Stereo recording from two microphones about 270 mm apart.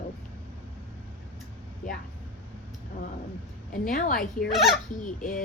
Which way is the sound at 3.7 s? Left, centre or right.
Left.